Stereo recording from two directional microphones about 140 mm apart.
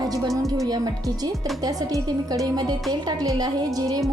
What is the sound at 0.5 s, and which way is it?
Speech, 25° right (ahead or behind).